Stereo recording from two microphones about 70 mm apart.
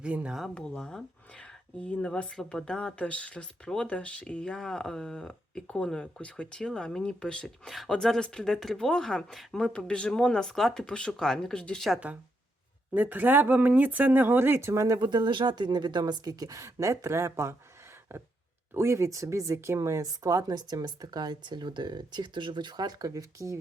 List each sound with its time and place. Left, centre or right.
0.0 s speech: centre
0.5 s speech: centre
12.9 s speech: right
14.8 s speech: right
20.5 s speech: right